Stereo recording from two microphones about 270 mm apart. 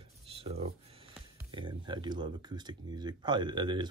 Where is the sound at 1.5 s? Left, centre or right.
Centre.